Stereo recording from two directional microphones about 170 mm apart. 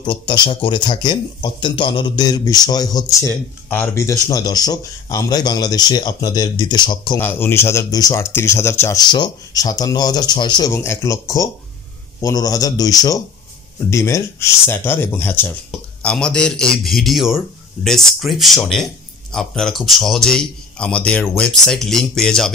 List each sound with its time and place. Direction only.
0.0 s speech: 25° left (ahead or behind)
7.2 s a man's voice: 10° left (ahead or behind)